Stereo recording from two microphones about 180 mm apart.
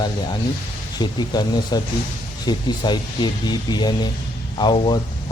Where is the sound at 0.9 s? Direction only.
20° left (ahead or behind).